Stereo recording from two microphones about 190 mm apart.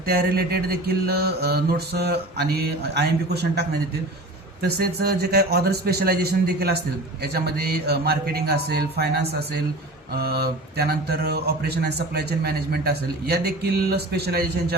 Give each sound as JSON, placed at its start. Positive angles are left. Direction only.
{"t": 0.0, "sound": "speech", "side_deg": -55}